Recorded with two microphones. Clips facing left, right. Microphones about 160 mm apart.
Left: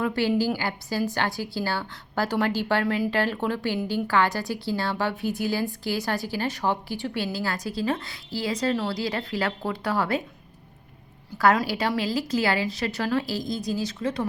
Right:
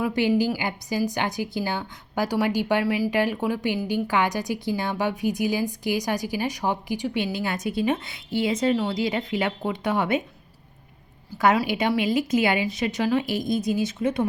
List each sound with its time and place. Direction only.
0.0 s speech: 15° right (ahead or behind)
2.8 s speech: 5° right (ahead or behind); by 10.2 s 20° right (ahead or behind)
11.7 s speech: 15° right (ahead or behind)